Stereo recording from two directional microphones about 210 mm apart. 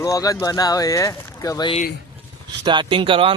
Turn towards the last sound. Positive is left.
turn(degrees=-25)  # may be behind; listen again after turning